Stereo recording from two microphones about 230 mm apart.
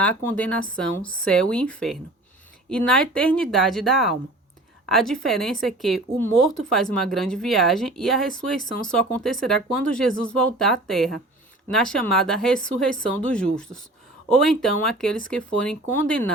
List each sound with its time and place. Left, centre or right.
0.0 s speech: centre